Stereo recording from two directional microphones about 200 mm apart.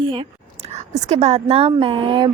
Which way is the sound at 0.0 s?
25° right (ahead or behind).